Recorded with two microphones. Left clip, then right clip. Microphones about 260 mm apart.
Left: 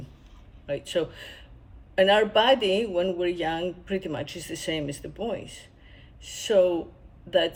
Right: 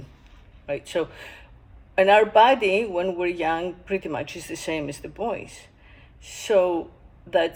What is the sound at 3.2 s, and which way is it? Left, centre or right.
Speech, right.